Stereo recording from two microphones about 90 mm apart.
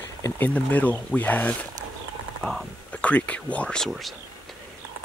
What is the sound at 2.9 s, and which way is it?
Speech, 15° left (ahead or behind).